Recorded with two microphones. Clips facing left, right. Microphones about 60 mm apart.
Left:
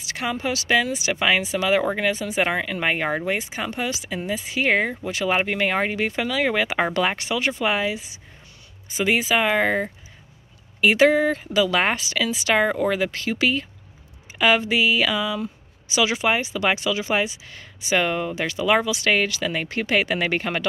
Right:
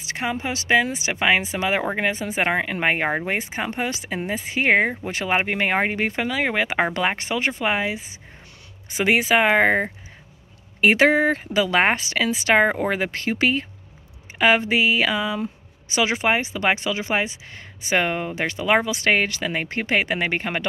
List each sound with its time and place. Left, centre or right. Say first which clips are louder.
0.0 s speech: even; right
8.9 s speech: right 2 dB; right